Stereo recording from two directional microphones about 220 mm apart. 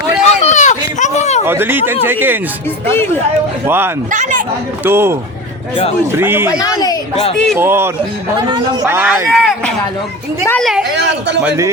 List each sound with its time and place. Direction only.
0.2 s a sound: 30° left (ahead or behind)
1.5 s speech: 10° right (ahead or behind)
2.9 s speech: 10° left (ahead or behind)
3.7 s speech: 10° right (ahead or behind)
4.1 s speech: 35° right (ahead or behind)
4.8 s speech: 10° right (ahead or behind)
6.1 s speech: 10° right (ahead or behind)
6.5 s speech: 15° left (ahead or behind)
7.3 s a woman's voice: centre (ahead or behind)
7.6 s a woman's voice: 10° right (ahead or behind)
10.9 s speech: 50° right (ahead or behind)
11.4 s speech: 15° right (ahead or behind)